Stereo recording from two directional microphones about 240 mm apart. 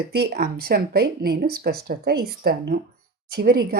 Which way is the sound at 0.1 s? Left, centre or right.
Right.